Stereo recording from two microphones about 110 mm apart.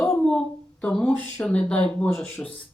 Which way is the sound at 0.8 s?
10° left (ahead or behind).